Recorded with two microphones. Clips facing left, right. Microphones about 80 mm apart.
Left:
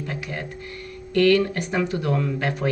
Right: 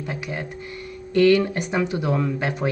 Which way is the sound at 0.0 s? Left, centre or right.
Centre.